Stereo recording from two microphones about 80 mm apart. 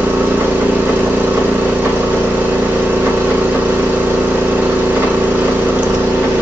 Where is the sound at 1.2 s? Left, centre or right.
Right.